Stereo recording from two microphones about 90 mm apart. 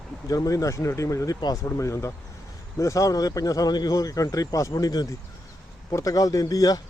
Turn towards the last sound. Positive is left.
turn(degrees=45)  # may be behind; listen again after turning